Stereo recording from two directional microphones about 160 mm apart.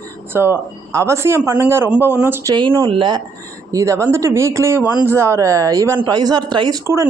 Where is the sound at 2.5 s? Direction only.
30° right (ahead or behind).